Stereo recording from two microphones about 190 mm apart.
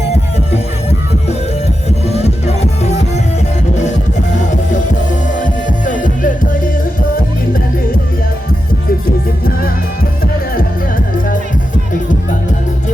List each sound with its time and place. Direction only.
0.5 s music: 35° left (ahead or behind)
5.4 s music: 45° left (ahead or behind)